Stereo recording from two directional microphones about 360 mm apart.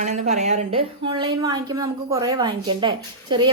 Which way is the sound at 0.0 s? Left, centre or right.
Centre.